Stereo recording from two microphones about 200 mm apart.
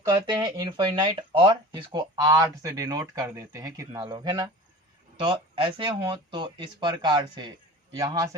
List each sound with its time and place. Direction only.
0.0 s a man's voice: 15° right (ahead or behind)